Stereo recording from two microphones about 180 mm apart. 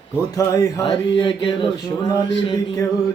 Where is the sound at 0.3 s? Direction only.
20° left (ahead or behind).